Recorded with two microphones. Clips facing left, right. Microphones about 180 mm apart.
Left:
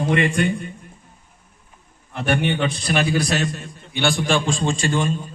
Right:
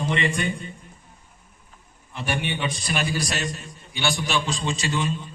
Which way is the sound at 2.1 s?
60° left (ahead or behind).